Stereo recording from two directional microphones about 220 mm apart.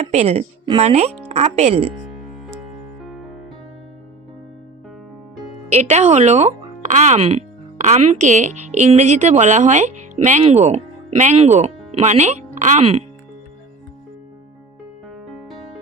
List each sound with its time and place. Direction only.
0.0 s speech: 30° right (ahead or behind)
5.7 s speech: 30° right (ahead or behind)
15.1 s music: centre (ahead or behind)